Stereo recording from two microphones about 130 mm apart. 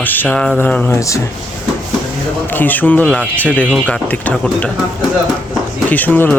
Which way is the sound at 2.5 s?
15° left (ahead or behind).